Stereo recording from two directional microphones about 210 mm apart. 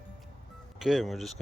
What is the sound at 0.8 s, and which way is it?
Speech, centre (ahead or behind).